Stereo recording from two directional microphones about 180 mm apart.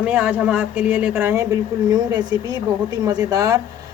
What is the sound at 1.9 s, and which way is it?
Speech, 20° right (ahead or behind).